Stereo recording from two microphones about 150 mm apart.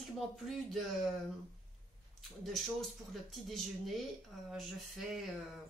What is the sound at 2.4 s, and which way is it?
Speech, centre (ahead or behind).